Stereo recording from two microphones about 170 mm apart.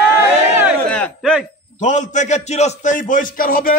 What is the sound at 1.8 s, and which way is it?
A man's voice, 45° left (ahead or behind).